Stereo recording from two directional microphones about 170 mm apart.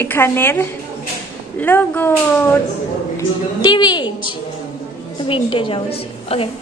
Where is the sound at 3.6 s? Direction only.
25° left (ahead or behind).